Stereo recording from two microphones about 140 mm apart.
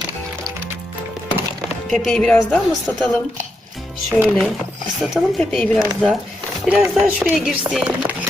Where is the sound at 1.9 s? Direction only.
5° left (ahead or behind).